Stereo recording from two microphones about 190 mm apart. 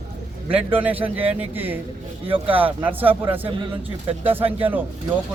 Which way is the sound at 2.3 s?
30° right (ahead or behind).